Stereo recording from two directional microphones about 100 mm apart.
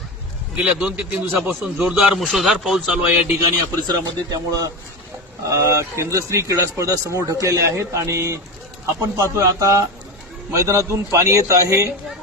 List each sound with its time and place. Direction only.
0.6 s a man's voice: 10° right (ahead or behind)
3.6 s a man's voice: 40° right (ahead or behind)